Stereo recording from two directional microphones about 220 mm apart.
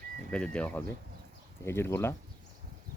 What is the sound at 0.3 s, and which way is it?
Speech, 5° left (ahead or behind).